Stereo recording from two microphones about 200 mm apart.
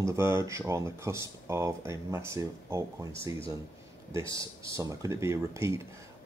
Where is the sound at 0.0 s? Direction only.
15° right (ahead or behind).